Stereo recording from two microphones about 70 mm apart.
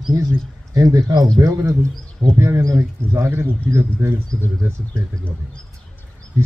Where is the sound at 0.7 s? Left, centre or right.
Right.